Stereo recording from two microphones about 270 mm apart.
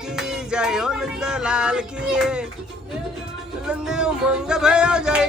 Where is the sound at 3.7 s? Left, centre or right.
Centre.